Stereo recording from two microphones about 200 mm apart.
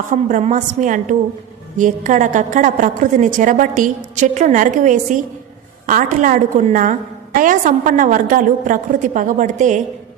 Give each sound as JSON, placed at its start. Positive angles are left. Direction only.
{"t": 0.1, "sound": "a woman's voice", "side_deg": -40}